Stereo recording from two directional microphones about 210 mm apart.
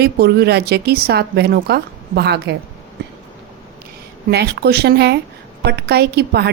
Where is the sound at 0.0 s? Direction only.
50° right (ahead or behind).